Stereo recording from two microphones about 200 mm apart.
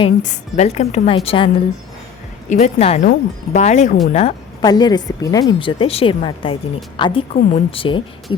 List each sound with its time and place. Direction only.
0.2 s a woman's voice: 35° left (ahead or behind)
2.5 s a woman's voice: 35° left (ahead or behind)
4.6 s speech: 20° left (ahead or behind)